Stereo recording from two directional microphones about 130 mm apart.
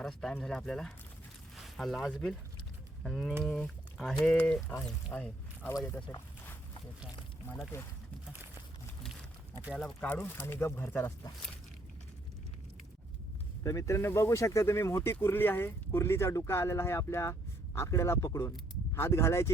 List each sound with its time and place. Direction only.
0.0 s speech: 5° left (ahead or behind); by 6.0 s 20° left (ahead or behind)
9.7 s speech: 10° left (ahead or behind)
13.7 s speech: 25° left (ahead or behind)